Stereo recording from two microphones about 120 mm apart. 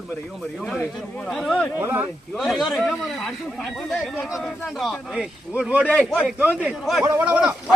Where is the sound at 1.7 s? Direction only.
15° right (ahead or behind).